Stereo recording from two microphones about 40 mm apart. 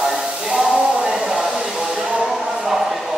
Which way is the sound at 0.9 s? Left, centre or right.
Right.